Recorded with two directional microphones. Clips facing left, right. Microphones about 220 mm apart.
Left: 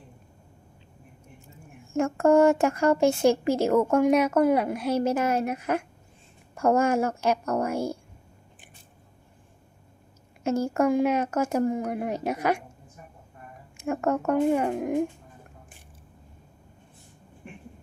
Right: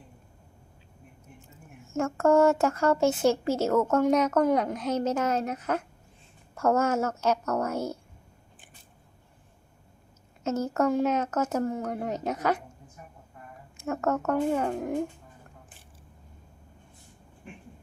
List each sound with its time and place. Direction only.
1.9 s a woman's voice: 15° left (ahead or behind)
10.4 s a woman's voice: 10° left (ahead or behind)
13.7 s a woman's voice: 15° left (ahead or behind)